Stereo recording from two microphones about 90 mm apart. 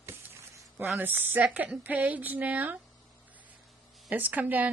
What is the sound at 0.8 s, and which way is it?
A woman's voice, 20° right (ahead or behind).